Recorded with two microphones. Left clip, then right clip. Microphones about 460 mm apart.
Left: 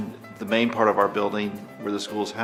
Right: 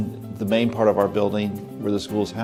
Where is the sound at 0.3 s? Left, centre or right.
Right.